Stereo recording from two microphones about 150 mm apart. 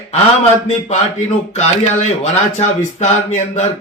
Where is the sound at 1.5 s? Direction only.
45° left (ahead or behind).